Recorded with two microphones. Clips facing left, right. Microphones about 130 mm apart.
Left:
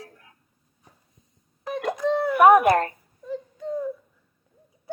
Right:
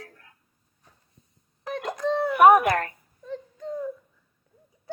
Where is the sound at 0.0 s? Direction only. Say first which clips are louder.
Left 1 dB; 15° left (ahead or behind).